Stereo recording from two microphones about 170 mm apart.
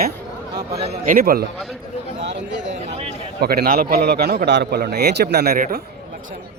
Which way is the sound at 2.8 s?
40° right (ahead or behind).